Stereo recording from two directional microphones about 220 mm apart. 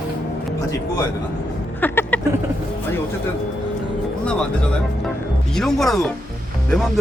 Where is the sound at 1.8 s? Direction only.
10° left (ahead or behind).